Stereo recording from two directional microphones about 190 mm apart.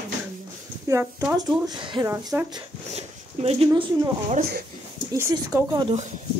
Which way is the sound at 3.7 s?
25° right (ahead or behind).